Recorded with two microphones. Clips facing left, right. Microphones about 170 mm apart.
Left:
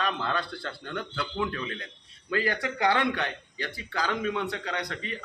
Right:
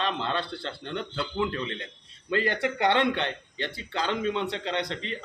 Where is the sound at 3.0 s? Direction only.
25° right (ahead or behind).